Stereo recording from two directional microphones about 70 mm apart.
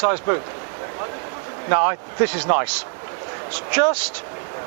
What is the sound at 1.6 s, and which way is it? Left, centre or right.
Speech, right.